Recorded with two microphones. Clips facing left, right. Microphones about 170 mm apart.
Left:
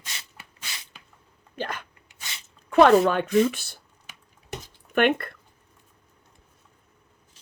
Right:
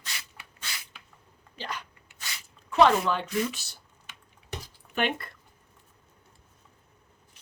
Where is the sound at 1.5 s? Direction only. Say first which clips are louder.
Left 5 dB; 50° left (ahead or behind).